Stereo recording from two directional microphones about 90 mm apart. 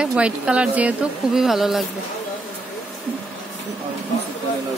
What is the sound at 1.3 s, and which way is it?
Speech, 5° right (ahead or behind).